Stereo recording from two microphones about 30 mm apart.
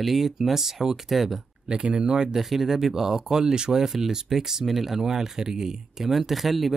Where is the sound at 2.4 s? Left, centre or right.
Centre.